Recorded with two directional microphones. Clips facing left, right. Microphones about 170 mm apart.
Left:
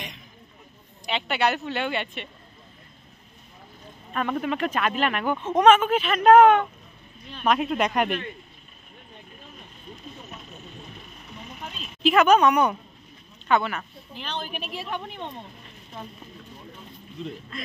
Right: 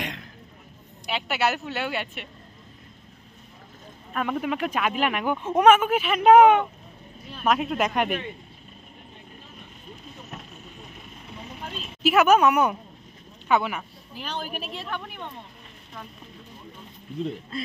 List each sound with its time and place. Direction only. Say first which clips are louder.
0.0 s a sound: right 6 dB; 90° right
1.0 s a woman's voice: left 1 dB; 5° right (ahead or behind)
4.1 s a woman's voice: even; 5° right (ahead or behind)
12.0 s a woman's voice: even; 5° right (ahead or behind)
14.8 s speech: left 2 dB; 20° left (ahead or behind)